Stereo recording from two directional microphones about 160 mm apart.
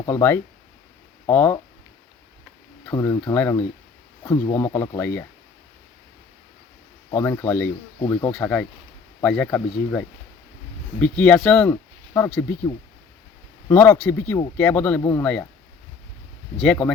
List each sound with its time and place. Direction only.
0.0 s speech: 15° left (ahead or behind)
2.9 s speech: 20° left (ahead or behind)
4.5 s speech: 15° left (ahead or behind)
7.1 s speech: 15° left (ahead or behind)
11.7 s a sound: 15° left (ahead or behind)
13.7 s speech: 15° left (ahead or behind)
16.6 s speech: 5° left (ahead or behind)